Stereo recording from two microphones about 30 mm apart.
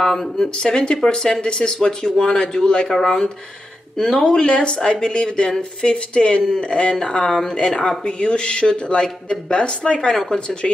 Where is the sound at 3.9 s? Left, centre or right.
Centre.